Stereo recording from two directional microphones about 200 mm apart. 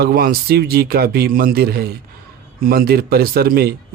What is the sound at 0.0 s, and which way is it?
Speech, 50° right (ahead or behind).